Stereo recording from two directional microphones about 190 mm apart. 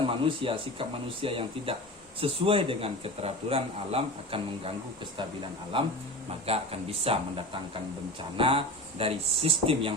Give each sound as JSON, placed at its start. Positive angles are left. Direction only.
{"t": 0.0, "sound": "speech", "side_deg": -30}
{"t": 5.7, "sound": "speech", "side_deg": -25}